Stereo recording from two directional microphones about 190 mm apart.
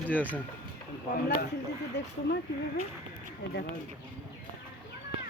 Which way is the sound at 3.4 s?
65° left (ahead or behind).